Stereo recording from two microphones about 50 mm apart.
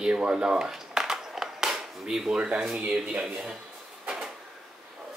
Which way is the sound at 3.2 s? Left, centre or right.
Centre.